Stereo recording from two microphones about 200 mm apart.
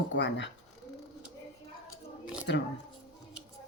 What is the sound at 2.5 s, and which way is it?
Speech, 60° left (ahead or behind).